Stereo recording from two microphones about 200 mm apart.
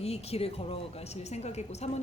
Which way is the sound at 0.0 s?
30° left (ahead or behind).